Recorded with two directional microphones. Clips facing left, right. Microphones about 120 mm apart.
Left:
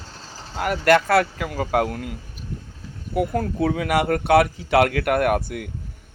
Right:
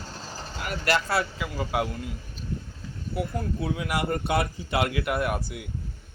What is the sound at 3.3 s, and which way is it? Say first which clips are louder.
Speech: left 7 dB; 60° left (ahead or behind).